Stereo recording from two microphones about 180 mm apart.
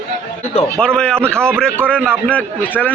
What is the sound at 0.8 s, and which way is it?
A man's voice, 5° left (ahead or behind).